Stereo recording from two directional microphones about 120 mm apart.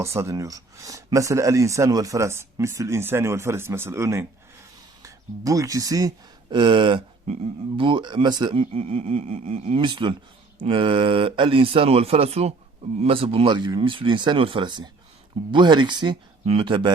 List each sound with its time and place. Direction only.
0.0 s speech: 25° right (ahead or behind)
8.7 s speech: 60° right (ahead or behind)
9.8 s speech: 40° right (ahead or behind); by 12.5 s 60° right (ahead or behind)
13.0 s speech: 50° right (ahead or behind)